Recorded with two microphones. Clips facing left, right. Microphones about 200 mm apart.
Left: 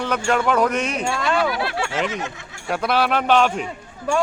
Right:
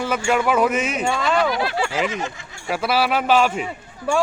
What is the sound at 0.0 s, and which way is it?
Speech, 5° right (ahead or behind).